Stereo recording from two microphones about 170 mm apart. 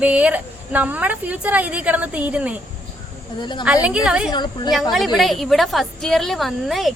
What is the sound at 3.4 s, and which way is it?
Speech, 25° left (ahead or behind).